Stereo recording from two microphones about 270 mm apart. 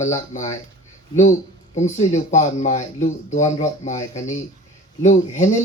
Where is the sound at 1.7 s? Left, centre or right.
Left.